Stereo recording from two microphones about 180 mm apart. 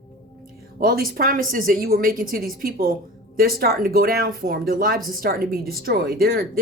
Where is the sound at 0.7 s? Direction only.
55° right (ahead or behind).